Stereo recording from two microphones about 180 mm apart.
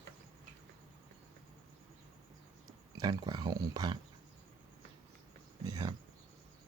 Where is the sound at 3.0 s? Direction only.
20° right (ahead or behind).